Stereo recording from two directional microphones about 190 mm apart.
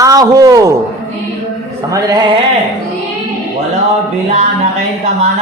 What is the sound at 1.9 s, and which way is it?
Speech, 15° right (ahead or behind).